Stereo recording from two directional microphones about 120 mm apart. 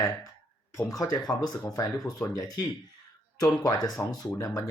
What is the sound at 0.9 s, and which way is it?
Speech, 30° left (ahead or behind).